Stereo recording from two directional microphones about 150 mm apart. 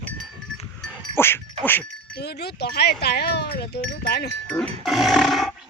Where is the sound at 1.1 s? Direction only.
15° left (ahead or behind).